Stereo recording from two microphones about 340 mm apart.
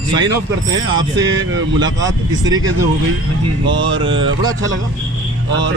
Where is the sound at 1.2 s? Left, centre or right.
Right.